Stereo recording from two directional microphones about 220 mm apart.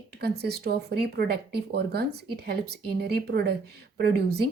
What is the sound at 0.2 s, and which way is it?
Speech, 45° right (ahead or behind).